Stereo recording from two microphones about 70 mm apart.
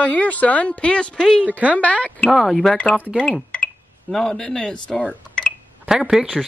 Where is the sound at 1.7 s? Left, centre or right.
Centre.